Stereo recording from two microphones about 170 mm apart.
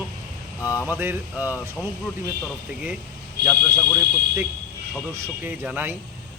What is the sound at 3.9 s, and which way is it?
Speech, 10° right (ahead or behind).